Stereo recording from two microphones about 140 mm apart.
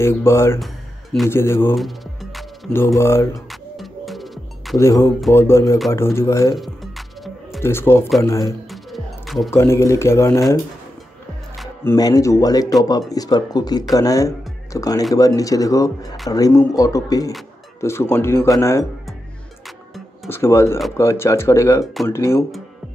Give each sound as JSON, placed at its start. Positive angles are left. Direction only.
{"t": 0.0, "sound": "speech", "side_deg": 20}
{"t": 1.8, "sound": "music", "side_deg": 0}
{"t": 3.0, "sound": "speech", "side_deg": 20}
{"t": 3.7, "sound": "music", "side_deg": 0}
{"t": 4.7, "sound": "speech", "side_deg": 20}
{"t": 6.5, "sound": "music", "side_deg": 0}
{"t": 7.6, "sound": "speech", "side_deg": 15}
{"t": 8.9, "sound": "music", "side_deg": 0}
{"t": 9.5, "sound": "speech", "side_deg": 20}
{"t": 12.0, "sound": "speech", "side_deg": 25}
{"t": 20.2, "sound": "speech", "side_deg": 20}